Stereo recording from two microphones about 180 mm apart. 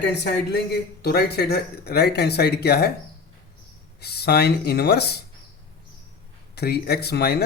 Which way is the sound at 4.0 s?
60° left (ahead or behind).